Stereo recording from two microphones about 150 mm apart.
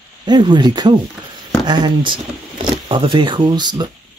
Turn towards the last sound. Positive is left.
turn(degrees=-30)  # may be behind; listen again after turning